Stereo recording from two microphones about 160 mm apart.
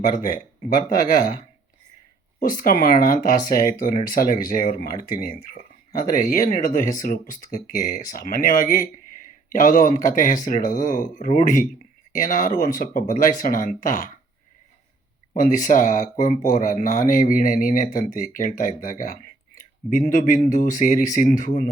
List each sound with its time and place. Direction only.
0.2 s speech: 55° left (ahead or behind)
2.4 s speech: 60° left (ahead or behind)
15.3 s speech: 55° left (ahead or behind)